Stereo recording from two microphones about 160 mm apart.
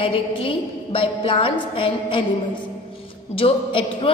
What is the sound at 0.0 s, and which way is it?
A woman's voice, 35° left (ahead or behind).